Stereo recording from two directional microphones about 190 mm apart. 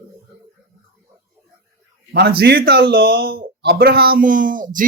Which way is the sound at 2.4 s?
55° right (ahead or behind).